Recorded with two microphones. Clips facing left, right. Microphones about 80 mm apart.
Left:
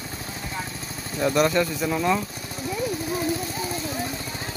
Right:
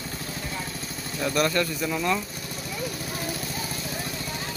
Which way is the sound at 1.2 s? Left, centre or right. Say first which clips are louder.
Left 4 dB; left.